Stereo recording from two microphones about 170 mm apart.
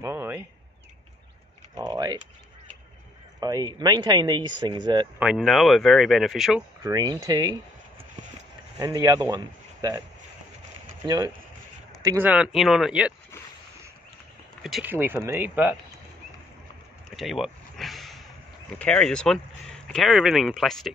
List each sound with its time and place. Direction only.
0.0 s a sound: 15° right (ahead or behind)
1.8 s typing: 25° right (ahead or behind)
3.3 s a man's voice: 20° right (ahead or behind)
5.2 s speech: 5° right (ahead or behind)
6.8 s speech: 20° right (ahead or behind)
8.7 s a man's voice: 20° right (ahead or behind)
11.1 s speech: 25° right (ahead or behind)
12.2 s speech: 5° right (ahead or behind)
14.6 s speech: centre (ahead or behind)
14.9 s speech: 10° right (ahead or behind)
17.1 s a sound: centre (ahead or behind)
18.8 s speech: 5° left (ahead or behind)